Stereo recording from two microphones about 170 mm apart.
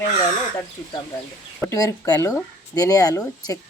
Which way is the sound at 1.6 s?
20° left (ahead or behind).